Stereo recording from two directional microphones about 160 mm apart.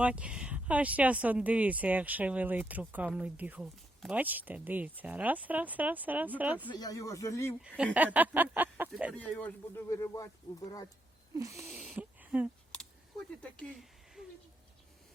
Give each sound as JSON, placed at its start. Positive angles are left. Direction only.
{"t": 0.0, "sound": "speech", "side_deg": -5}
{"t": 6.7, "sound": "speech", "side_deg": 25}
{"t": 7.9, "sound": "speech", "side_deg": -10}
{"t": 9.1, "sound": "speech", "side_deg": 10}
{"t": 11.3, "sound": "speech", "side_deg": -20}
{"t": 11.8, "sound": "a sound", "side_deg": -10}
{"t": 12.7, "sound": "scissors", "side_deg": 5}
{"t": 13.4, "sound": "speech", "side_deg": 5}